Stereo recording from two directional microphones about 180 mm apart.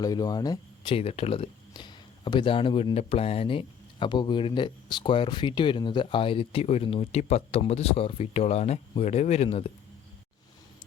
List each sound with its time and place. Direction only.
0.0 s speech: 20° left (ahead or behind)